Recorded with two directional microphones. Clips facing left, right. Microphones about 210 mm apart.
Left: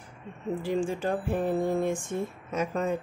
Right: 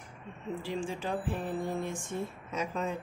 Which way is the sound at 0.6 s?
50° left (ahead or behind).